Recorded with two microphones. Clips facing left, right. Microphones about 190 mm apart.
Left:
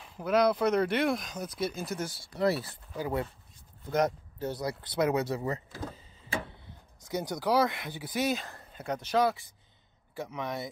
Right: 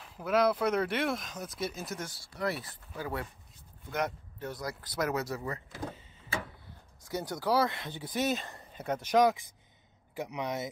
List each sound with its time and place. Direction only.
0.2 s speech: 5° right (ahead or behind)
2.3 s speech: 30° left (ahead or behind)
3.0 s speech: 20° left (ahead or behind)
3.9 s speech: 40° left (ahead or behind)
7.1 s speech: 15° left (ahead or behind); by 10.7 s 15° right (ahead or behind)